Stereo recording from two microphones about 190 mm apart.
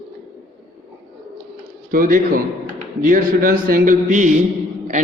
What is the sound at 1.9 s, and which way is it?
A man's voice, 45° right (ahead or behind).